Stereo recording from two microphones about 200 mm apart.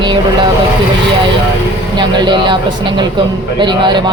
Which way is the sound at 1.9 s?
20° right (ahead or behind).